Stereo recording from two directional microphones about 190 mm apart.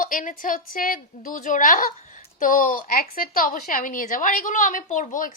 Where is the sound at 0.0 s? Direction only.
45° left (ahead or behind).